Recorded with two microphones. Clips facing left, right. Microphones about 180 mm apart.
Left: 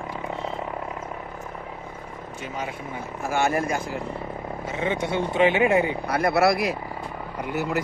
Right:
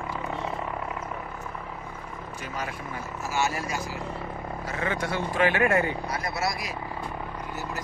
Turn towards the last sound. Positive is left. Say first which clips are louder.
# left 8 dB
turn(degrees=65)  # may be behind; listen again after turning